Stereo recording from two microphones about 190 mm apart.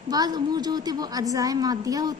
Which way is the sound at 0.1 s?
20° right (ahead or behind).